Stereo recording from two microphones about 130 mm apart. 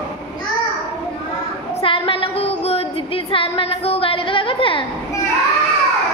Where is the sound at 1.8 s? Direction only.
45° left (ahead or behind).